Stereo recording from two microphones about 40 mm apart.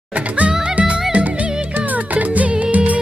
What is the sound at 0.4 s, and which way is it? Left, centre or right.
Music, right.